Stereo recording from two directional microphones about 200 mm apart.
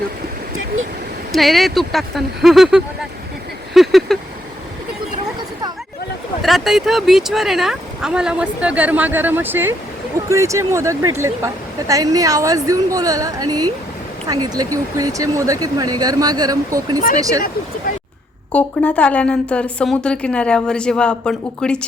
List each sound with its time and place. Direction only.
1.3 s speech: centre (ahead or behind)
3.8 s a sound: centre (ahead or behind)
6.4 s speech: centre (ahead or behind); by 17.4 s 15° right (ahead or behind)
18.5 s speech: 5° left (ahead or behind)